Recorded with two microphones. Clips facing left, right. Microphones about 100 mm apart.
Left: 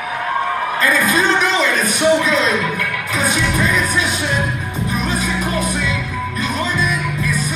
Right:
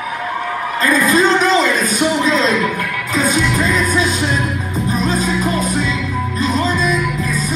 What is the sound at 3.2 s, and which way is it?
Music, 30° right (ahead or behind).